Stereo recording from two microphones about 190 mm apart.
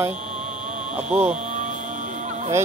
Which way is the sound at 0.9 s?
5° right (ahead or behind).